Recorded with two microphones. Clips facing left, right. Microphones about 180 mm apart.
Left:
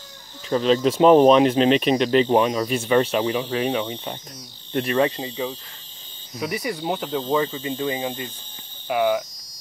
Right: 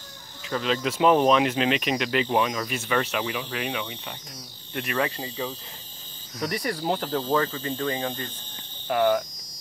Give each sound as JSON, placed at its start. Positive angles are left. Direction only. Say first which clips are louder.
{"t": 0.5, "sound": "speech", "louder": "left 8 dB", "side_deg": 30}
{"t": 6.4, "sound": "speech", "louder": "left 1 dB", "side_deg": 5}
{"t": 7.3, "sound": "hum", "louder": "left 4 dB", "side_deg": 10}
{"t": 8.8, "sound": "cricket", "louder": "left 1 dB", "side_deg": 5}